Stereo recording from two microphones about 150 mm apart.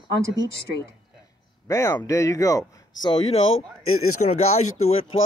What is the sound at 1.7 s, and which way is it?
Speech, 20° left (ahead or behind).